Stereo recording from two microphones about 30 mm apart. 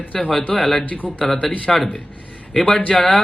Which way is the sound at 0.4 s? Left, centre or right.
Left.